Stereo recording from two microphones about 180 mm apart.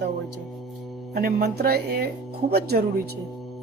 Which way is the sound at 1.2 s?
55° right (ahead or behind).